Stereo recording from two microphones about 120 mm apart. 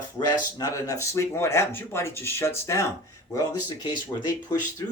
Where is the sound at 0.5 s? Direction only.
30° left (ahead or behind).